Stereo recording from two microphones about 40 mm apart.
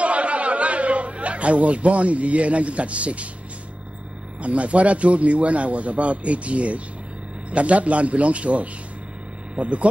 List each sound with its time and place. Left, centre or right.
0.0 s chatter: right
4.4 s a man's voice: right